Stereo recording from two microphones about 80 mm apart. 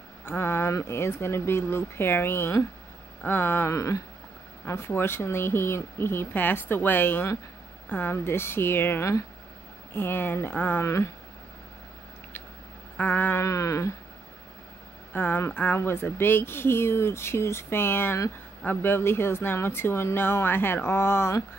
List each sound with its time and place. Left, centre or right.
0.2 s speech: left
10.8 s speech: left
12.9 s a sound: left
13.4 s speech: left
15.1 s speech: left